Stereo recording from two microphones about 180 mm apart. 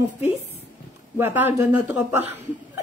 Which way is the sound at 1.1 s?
10° right (ahead or behind).